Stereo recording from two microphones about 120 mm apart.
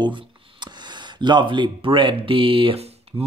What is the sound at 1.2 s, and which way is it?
Speech, 40° right (ahead or behind).